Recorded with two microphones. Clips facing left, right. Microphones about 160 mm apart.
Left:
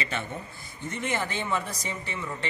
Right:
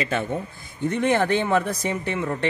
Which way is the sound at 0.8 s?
60° right (ahead or behind).